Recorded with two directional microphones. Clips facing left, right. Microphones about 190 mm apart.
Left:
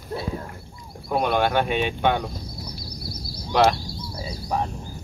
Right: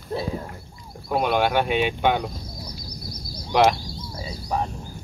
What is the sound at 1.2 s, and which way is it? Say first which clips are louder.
Speech: even; 10° right (ahead or behind).